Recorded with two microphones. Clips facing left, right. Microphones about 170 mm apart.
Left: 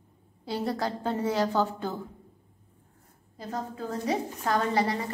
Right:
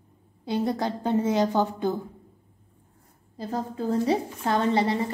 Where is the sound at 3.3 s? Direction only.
30° right (ahead or behind).